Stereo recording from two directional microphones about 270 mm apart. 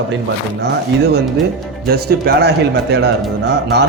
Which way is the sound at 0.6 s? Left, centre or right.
Right.